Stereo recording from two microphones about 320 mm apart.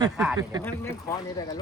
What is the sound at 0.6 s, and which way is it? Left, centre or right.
Speech, centre.